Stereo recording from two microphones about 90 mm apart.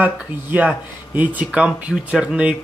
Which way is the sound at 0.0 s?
20° right (ahead or behind).